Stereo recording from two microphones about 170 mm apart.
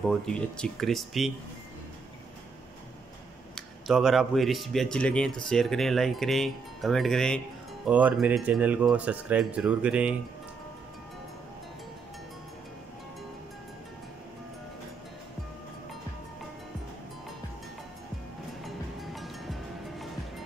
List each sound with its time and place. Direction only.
0.0 s speech: 5° left (ahead or behind)
3.5 s speech: centre (ahead or behind)
7.9 s speech: 10° right (ahead or behind)
18.6 s music: centre (ahead or behind)